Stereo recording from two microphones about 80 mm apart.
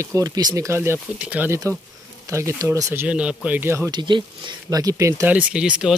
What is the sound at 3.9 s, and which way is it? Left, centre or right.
Speech, right.